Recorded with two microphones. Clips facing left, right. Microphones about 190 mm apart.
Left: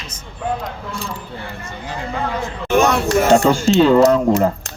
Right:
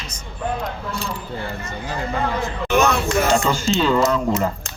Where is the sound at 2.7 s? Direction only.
45° left (ahead or behind).